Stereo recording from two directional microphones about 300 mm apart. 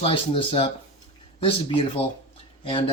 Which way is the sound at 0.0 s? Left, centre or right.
Centre.